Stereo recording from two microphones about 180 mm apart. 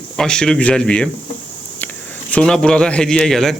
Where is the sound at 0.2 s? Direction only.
5° left (ahead or behind).